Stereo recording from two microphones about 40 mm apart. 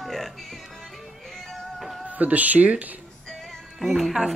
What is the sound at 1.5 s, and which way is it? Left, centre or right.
Music, centre.